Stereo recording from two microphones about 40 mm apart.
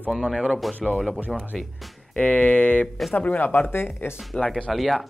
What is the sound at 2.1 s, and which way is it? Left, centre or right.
Speech, left.